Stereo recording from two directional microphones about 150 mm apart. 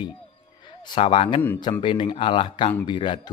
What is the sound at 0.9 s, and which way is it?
Speech, 35° left (ahead or behind).